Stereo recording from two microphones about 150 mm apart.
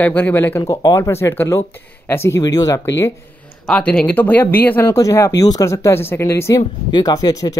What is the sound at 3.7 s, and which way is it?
Speech, 10° left (ahead or behind).